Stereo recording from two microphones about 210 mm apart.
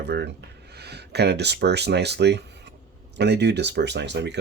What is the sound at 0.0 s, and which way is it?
Speech, 55° right (ahead or behind).